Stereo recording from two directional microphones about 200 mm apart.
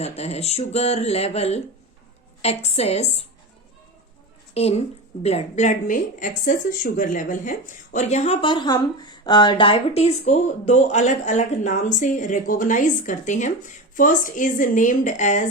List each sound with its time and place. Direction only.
0.0 s a woman's voice: 30° left (ahead or behind)
4.5 s a woman's voice: 30° left (ahead or behind)